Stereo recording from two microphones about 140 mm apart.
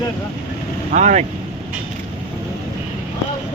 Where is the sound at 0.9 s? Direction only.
55° right (ahead or behind).